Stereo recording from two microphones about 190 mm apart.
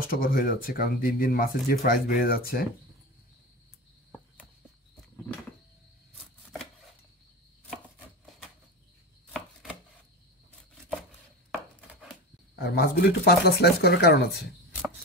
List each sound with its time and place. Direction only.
0.0 s speech: 50° left (ahead or behind)
9.3 s chopping: centre (ahead or behind)
12.5 s speech: 50° left (ahead or behind)